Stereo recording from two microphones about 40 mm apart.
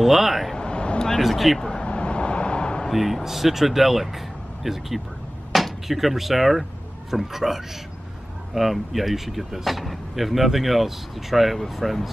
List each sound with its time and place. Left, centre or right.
0.0 s speech: centre
0.6 s a sound: left
1.2 s speech: centre
1.6 s vehicle: centre
2.9 s a man's voice: centre